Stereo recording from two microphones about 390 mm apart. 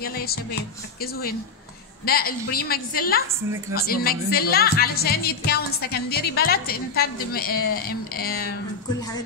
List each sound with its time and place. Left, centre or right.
0.0 s speech: left
2.0 s speech: left